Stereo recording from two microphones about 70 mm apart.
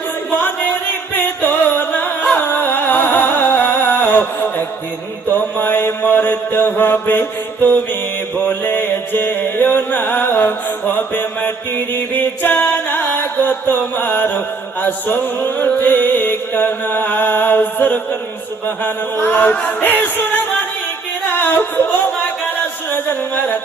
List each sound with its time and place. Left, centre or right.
0.3 s music: left
5.3 s mantra: left
8.4 s music: left
21.4 s music: left